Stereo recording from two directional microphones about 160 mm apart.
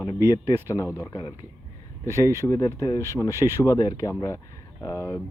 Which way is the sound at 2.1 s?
20° right (ahead or behind).